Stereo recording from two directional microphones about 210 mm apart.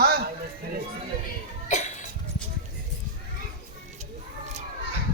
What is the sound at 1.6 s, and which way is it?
Cough, 35° left (ahead or behind).